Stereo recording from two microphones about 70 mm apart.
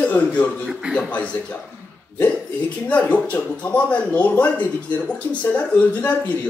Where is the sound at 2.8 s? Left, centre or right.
Left.